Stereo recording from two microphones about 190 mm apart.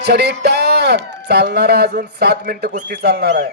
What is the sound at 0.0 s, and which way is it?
A man's voice, 60° right (ahead or behind).